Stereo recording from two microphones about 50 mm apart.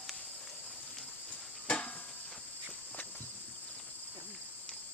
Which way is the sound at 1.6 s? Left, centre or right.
Left.